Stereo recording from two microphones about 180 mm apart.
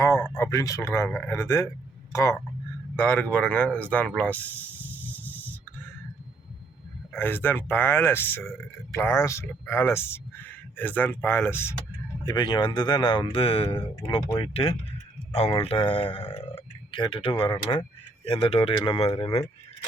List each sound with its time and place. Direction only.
0.3 s speech: 15° left (ahead or behind)
2.9 s speech: 10° left (ahead or behind)
7.1 s speech: 10° left (ahead or behind)
12.2 s speech: 25° left (ahead or behind)